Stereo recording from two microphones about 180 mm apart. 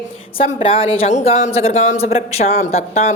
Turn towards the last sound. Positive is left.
turn(degrees=35)  # may be behind; listen again after turning